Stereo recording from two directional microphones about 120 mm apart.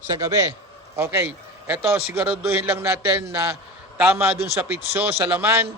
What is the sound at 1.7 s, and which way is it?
A man's voice, 10° right (ahead or behind).